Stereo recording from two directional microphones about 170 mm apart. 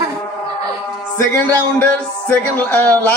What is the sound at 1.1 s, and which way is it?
Music, 15° left (ahead or behind).